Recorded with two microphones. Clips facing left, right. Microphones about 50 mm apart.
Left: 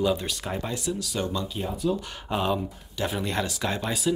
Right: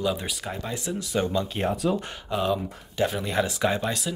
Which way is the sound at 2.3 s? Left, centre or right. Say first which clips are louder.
Even; centre.